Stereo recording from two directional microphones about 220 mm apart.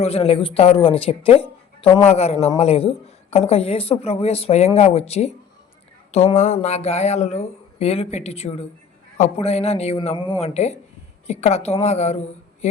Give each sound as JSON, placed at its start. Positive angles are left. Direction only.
{"t": 0.0, "sound": "a woman's voice", "side_deg": 25}